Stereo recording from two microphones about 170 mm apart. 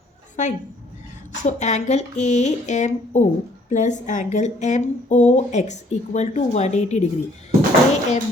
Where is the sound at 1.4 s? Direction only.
45° left (ahead or behind).